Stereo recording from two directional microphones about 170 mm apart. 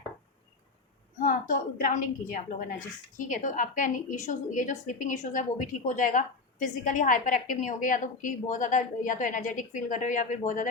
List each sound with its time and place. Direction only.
1.2 s a woman's voice: 55° left (ahead or behind)